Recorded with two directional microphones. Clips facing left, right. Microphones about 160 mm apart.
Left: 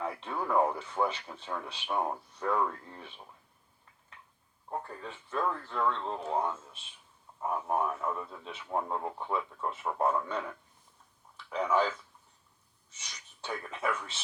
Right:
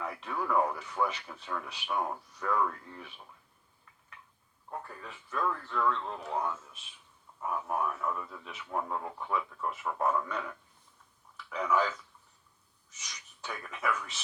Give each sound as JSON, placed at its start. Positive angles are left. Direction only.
{"t": 0.0, "sound": "speech", "side_deg": 30}
{"t": 4.7, "sound": "speech", "side_deg": 30}
{"t": 11.4, "sound": "speech", "side_deg": 30}